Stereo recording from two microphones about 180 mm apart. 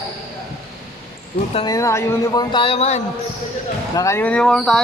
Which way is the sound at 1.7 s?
15° left (ahead or behind).